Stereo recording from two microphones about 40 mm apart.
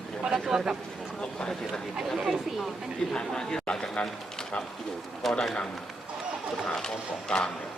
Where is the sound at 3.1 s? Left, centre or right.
Centre.